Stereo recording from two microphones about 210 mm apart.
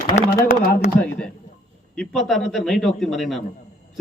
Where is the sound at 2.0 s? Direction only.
Centre (ahead or behind).